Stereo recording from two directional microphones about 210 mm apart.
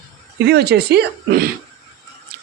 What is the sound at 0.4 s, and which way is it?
Speech, 50° right (ahead or behind).